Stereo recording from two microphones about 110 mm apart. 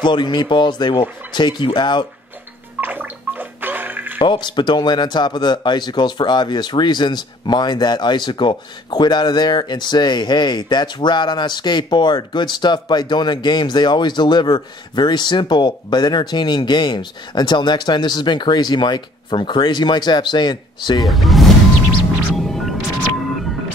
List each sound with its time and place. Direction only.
0.0 s speech: 45° left (ahead or behind)
2.8 s gargling: 15° right (ahead or behind)
4.2 s speech: 45° left (ahead or behind)
21.1 s speech: centre (ahead or behind)
22.3 s music: centre (ahead or behind)